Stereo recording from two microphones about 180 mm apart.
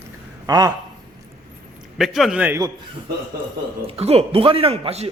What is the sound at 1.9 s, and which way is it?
Speech, centre (ahead or behind).